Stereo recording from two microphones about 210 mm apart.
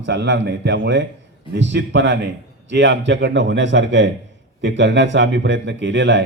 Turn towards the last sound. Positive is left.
turn(degrees=-55)  # may be behind; listen again after turning